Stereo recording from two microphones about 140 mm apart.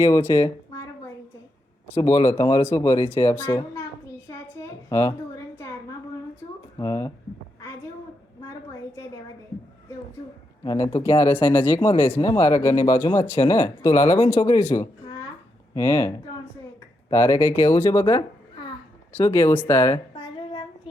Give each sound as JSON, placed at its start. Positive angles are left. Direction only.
{"t": 0.0, "sound": "speech", "side_deg": 20}
{"t": 2.0, "sound": "speech", "side_deg": 25}
{"t": 4.3, "sound": "a sound", "side_deg": 25}
{"t": 6.7, "sound": "speech", "side_deg": 25}
{"t": 10.6, "sound": "speech", "side_deg": 30}
{"t": 19.1, "sound": "speech", "side_deg": 20}
{"t": 20.1, "sound": "a sound", "side_deg": 35}